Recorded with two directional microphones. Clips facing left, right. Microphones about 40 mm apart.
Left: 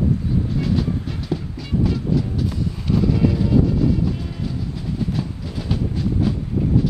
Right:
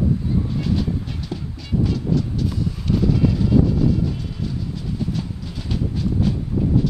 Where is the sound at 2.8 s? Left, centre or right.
Centre.